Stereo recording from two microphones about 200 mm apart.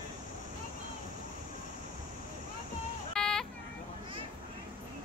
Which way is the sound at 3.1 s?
5° left (ahead or behind).